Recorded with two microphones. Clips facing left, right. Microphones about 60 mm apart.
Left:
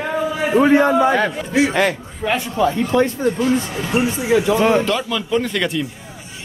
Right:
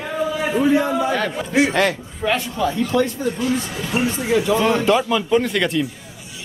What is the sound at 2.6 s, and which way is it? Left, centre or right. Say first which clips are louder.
Speech: left 5 dB; left.